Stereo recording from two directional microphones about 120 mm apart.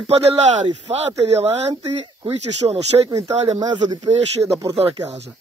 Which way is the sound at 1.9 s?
55° right (ahead or behind).